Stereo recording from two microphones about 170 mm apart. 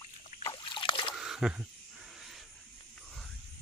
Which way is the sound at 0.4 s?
30° left (ahead or behind).